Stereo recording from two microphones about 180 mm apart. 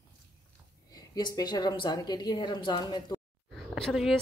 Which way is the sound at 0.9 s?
20° left (ahead or behind).